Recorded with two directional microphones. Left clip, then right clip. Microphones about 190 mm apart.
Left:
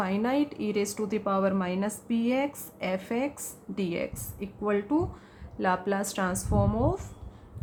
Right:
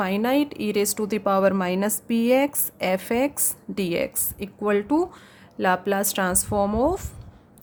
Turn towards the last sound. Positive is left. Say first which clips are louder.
# right 6 dB
turn(degrees=-55)  # may be behind; listen again after turning